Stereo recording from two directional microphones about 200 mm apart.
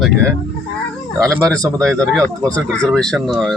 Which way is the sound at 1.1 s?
5° left (ahead or behind).